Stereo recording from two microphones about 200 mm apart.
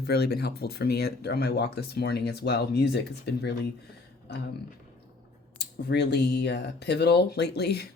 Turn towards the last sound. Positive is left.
turn(degrees=55)  # may be behind; listen again after turning